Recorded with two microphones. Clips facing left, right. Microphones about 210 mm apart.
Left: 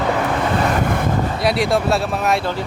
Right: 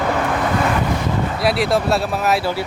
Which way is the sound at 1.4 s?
Centre (ahead or behind).